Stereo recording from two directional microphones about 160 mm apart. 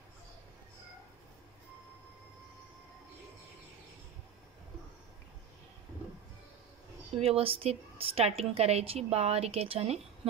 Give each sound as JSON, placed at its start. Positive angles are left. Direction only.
{"t": 7.2, "sound": "a woman's voice", "side_deg": -40}